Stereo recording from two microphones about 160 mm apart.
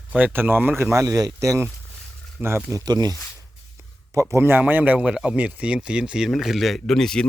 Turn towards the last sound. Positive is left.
turn(degrees=5)  # may be behind; listen again after turning